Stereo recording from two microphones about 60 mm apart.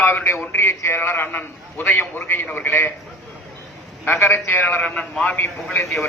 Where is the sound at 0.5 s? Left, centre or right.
Left.